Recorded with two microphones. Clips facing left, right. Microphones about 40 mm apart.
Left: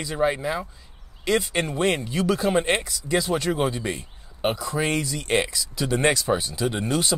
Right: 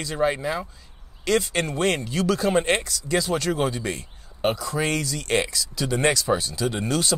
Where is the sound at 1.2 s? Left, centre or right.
Centre.